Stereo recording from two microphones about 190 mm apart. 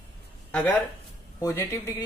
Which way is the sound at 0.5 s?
5° left (ahead or behind).